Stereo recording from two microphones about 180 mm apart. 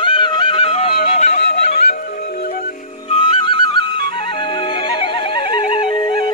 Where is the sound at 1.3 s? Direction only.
65° left (ahead or behind).